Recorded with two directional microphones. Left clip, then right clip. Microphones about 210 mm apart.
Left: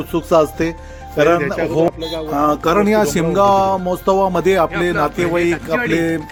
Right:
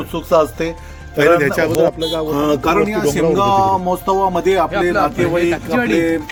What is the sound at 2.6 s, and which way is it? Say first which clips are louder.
Speech: left 1 dB; 40° left (ahead or behind).